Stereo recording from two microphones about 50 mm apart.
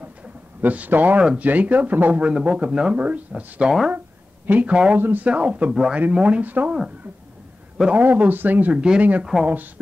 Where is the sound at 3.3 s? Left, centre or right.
Centre.